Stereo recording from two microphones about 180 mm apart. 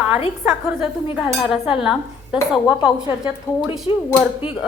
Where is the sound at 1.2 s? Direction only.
5° right (ahead or behind).